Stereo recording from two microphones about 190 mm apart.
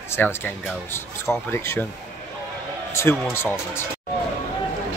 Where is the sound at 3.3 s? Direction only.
15° left (ahead or behind).